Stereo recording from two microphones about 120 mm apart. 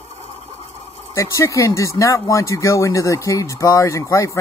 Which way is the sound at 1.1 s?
25° left (ahead or behind).